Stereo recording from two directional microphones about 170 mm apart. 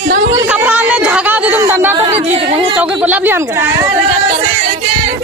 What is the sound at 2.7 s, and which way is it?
Speech, 5° right (ahead or behind).